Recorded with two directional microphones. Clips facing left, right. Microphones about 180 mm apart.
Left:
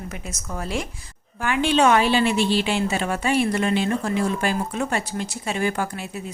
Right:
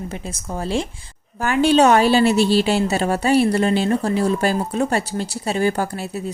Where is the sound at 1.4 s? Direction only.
40° right (ahead or behind).